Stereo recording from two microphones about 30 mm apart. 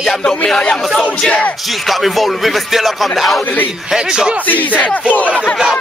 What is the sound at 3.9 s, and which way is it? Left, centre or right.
Speech, right.